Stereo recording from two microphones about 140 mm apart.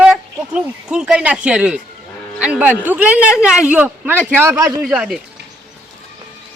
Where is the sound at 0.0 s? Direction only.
5° right (ahead or behind).